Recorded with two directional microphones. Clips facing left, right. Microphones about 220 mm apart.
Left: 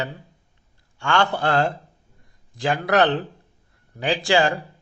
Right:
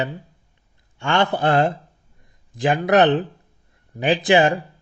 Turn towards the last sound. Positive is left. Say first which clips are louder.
# right 4 dB
turn(degrees=-20)  # may be behind; listen again after turning